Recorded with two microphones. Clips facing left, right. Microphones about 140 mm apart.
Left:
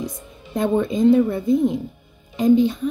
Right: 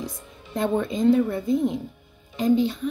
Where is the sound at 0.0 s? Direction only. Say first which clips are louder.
Left 4 dB; 15° left (ahead or behind).